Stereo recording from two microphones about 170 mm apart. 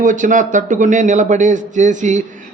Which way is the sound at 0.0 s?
50° right (ahead or behind).